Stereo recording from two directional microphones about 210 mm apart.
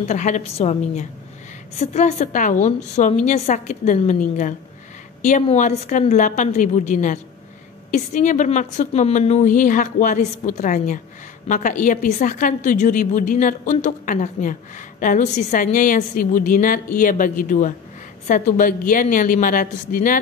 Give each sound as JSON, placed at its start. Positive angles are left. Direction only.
{"t": 0.1, "sound": "a woman's voice", "side_deg": 35}